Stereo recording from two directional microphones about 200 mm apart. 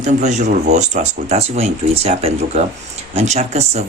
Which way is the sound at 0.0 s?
35° right (ahead or behind).